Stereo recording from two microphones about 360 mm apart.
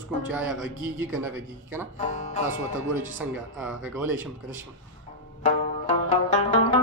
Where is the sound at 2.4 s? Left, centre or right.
Centre.